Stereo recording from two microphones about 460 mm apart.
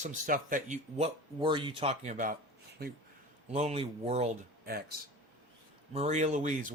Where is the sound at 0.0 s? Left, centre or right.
Centre.